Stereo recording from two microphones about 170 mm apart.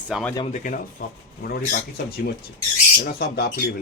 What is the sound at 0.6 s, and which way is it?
Speech, 50° left (ahead or behind).